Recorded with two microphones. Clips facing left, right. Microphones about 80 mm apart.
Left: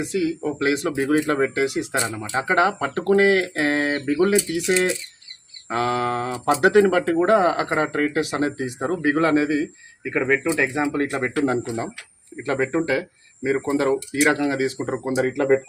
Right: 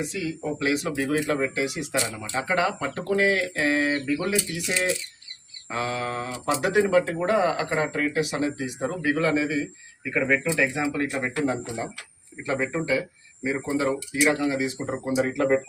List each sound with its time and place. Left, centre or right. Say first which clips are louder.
0.2 s speech: left 7 dB; left
5.6 s speech: left 6 dB; left
10.0 s speech: left 3 dB; left
10.9 s speech: left 4 dB; left